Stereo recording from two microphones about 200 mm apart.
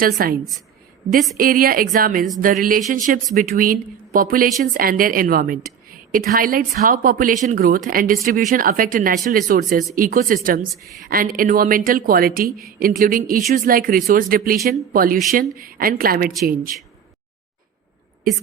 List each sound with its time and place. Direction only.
0.0 s speech: 45° right (ahead or behind)
1.4 s speech: 45° right (ahead or behind)